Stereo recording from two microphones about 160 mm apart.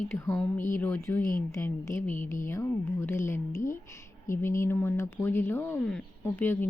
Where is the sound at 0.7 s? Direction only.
15° left (ahead or behind).